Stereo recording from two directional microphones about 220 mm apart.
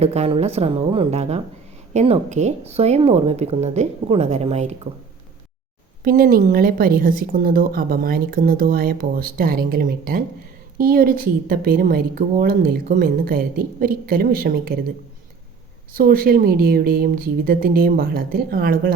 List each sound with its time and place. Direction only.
0.0 s speech: 30° right (ahead or behind)
6.0 s a woman's voice: 40° right (ahead or behind)
15.9 s a woman's voice: 40° right (ahead or behind)